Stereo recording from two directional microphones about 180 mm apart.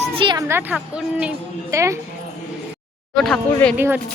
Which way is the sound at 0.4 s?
10° right (ahead or behind).